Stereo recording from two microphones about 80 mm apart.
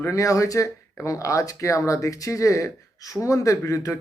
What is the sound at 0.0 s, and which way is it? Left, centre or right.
Speech, left.